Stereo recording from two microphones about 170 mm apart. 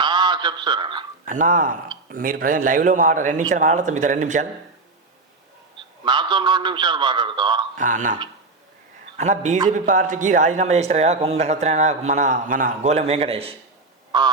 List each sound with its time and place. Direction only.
0.0 s a sound: 25° right (ahead or behind)
1.2 s speech: 50° right (ahead or behind)
6.1 s a man's voice: 25° right (ahead or behind)
7.8 s a man's voice: 50° right (ahead or behind); by 14.3 s 25° right (ahead or behind)